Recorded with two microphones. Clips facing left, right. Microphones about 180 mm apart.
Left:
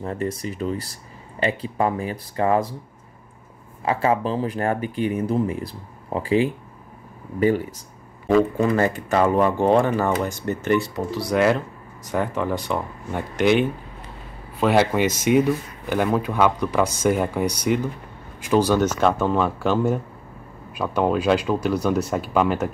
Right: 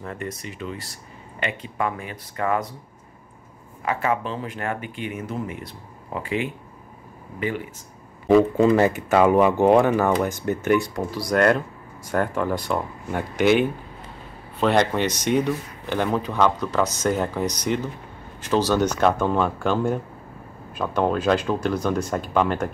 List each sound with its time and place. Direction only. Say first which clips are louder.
0.0 s speech: left 6 dB; 30° left (ahead or behind)
3.8 s speech: left 3 dB; 30° left (ahead or behind)
8.7 s speech: right 2 dB; 10° right (ahead or behind)
11.2 s speech: even; 5° left (ahead or behind)